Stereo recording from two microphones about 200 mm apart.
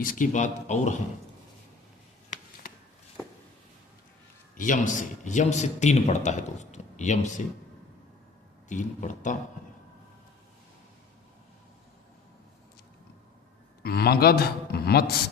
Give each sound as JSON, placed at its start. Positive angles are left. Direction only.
{"t": 0.0, "sound": "speech", "side_deg": 40}
{"t": 2.6, "sound": "a sound", "side_deg": 45}
{"t": 4.5, "sound": "speech", "side_deg": 40}
{"t": 8.7, "sound": "speech", "side_deg": 40}
{"t": 13.8, "sound": "a man's voice", "side_deg": 50}